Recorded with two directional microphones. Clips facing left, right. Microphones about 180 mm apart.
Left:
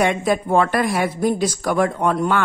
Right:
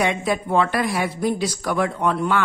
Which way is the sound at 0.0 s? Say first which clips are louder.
Left 3 dB; 45° left (ahead or behind).